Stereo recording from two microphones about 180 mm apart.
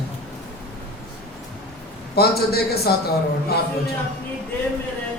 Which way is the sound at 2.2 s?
60° left (ahead or behind).